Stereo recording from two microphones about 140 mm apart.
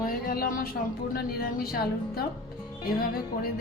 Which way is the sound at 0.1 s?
90° left.